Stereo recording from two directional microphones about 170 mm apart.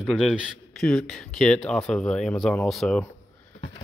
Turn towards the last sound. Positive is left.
turn(degrees=5)  # may be behind; listen again after turning